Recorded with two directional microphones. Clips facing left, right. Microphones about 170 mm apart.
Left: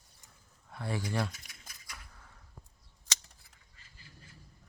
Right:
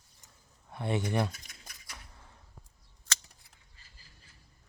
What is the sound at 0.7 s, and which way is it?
Speech, 25° right (ahead or behind).